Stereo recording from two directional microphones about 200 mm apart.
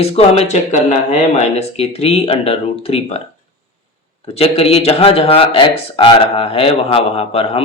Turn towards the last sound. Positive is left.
turn(degrees=30)  # may be behind; listen again after turning